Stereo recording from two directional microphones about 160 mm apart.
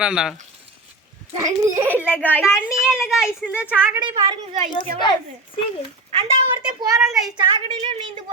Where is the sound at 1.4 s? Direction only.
15° right (ahead or behind).